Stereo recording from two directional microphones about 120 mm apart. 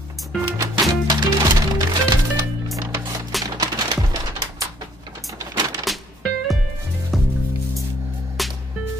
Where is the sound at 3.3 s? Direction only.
Centre (ahead or behind).